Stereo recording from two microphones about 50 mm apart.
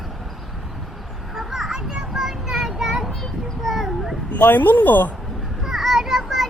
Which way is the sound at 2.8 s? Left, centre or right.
Centre.